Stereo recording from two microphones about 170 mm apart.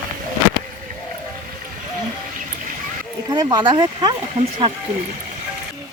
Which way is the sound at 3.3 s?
25° right (ahead or behind).